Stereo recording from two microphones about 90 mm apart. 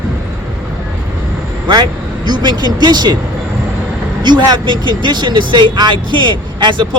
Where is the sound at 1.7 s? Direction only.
55° right (ahead or behind).